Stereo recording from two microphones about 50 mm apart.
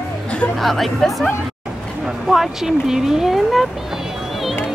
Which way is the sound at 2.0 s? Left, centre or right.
Centre.